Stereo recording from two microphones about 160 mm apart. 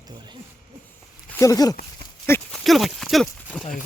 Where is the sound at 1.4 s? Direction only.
20° left (ahead or behind).